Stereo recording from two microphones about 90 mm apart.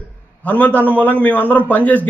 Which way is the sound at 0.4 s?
15° left (ahead or behind).